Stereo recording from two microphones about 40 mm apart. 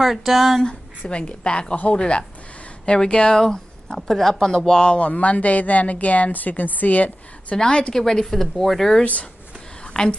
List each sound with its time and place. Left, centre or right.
0.0 s speech: centre
0.6 s a woman's voice: left; by 4.6 s centre
4.6 s speech: centre; by 7.5 s left
7.5 s a woman's voice: left
9.9 s a woman's voice: left